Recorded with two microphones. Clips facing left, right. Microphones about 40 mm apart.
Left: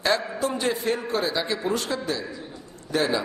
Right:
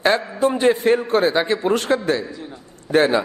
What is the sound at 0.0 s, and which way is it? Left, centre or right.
A man's voice, right.